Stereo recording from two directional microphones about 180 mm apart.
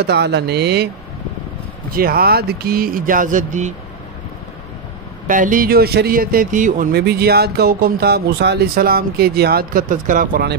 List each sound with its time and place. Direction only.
0.0 s speech: 65° right (ahead or behind)
1.9 s speech: 55° right (ahead or behind)
5.2 s speech: 45° right (ahead or behind)
7.0 s speech: 60° right (ahead or behind)